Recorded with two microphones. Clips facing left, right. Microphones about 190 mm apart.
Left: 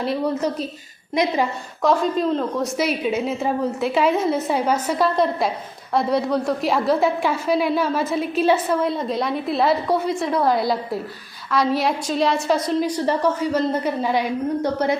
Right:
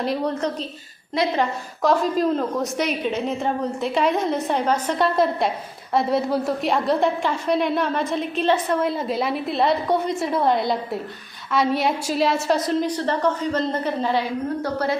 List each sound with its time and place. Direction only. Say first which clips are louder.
0.0 s a woman's voice: left 1 dB; centre (ahead or behind)
1.1 s a woman's voice: left 1 dB; 15° left (ahead or behind)
1.8 s a woman's voice: even; centre (ahead or behind)
12.8 s a woman's voice: left 2 dB; 10° left (ahead or behind)